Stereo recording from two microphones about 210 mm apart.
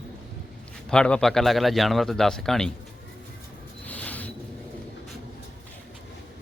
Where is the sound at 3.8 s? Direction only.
5° left (ahead or behind).